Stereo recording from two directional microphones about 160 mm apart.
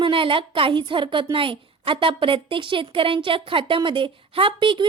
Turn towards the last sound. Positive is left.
turn(degrees=-30)  # may be behind; listen again after turning